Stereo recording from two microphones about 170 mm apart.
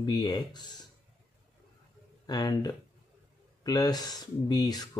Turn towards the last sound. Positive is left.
turn(degrees=25)  # may be behind; listen again after turning